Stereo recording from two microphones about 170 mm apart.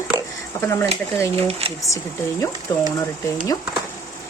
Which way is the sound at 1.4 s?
35° right (ahead or behind).